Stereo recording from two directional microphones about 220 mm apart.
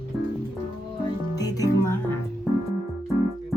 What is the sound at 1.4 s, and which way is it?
Music, 15° left (ahead or behind).